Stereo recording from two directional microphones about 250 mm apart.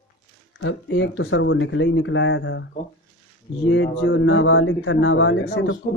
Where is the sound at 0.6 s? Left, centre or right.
Left.